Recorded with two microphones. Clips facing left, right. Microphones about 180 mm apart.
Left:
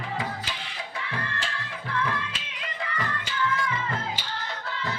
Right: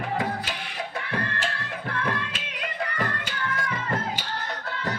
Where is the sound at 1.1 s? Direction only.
55° right (ahead or behind).